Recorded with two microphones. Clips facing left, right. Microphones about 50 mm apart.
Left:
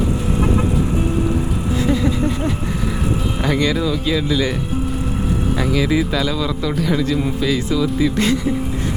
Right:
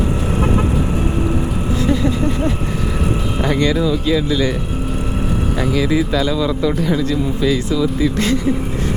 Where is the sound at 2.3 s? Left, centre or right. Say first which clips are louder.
Right 2 dB; right.